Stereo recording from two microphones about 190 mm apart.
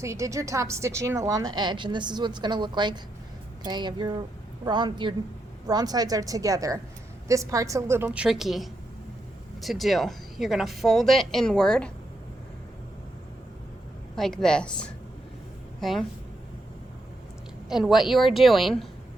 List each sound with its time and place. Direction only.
0.0 s a woman's voice: 15° right (ahead or behind); by 11.9 s 5° left (ahead or behind)
14.2 s a woman's voice: 5° left (ahead or behind)
17.7 s a woman's voice: centre (ahead or behind)